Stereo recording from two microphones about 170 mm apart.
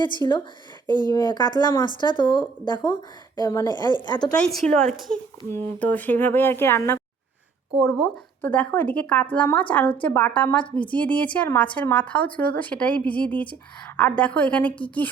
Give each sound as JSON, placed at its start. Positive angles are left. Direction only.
{"t": 0.0, "sound": "speech", "side_deg": 25}
{"t": 0.9, "sound": "speech", "side_deg": -25}
{"t": 1.1, "sound": "speech", "side_deg": 25}
{"t": 4.4, "sound": "a woman's voice", "side_deg": 5}
{"t": 7.7, "sound": "a woman's voice", "side_deg": 0}